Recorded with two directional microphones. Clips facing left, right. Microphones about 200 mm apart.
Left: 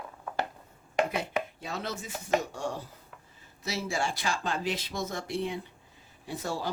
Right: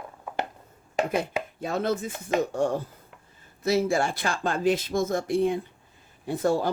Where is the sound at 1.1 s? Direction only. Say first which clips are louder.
Right 4 dB; 50° right (ahead or behind).